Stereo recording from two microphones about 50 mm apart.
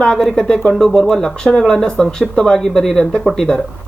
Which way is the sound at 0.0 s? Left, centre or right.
Centre.